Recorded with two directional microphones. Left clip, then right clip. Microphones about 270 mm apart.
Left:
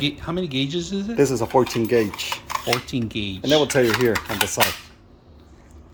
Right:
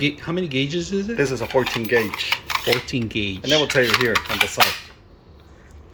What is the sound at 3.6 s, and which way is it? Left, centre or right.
Speech, left.